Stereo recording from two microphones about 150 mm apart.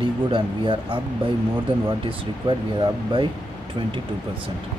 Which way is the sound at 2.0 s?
30° right (ahead or behind).